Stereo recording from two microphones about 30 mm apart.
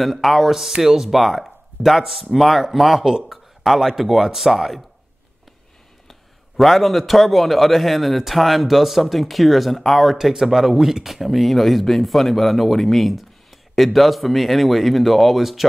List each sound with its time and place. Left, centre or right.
0.0 s speech: centre
1.1 s speech: centre
6.0 s a man's voice: centre
10.1 s speech: centre